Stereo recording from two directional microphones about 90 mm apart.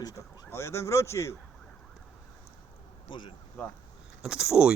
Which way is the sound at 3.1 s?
65° left (ahead or behind).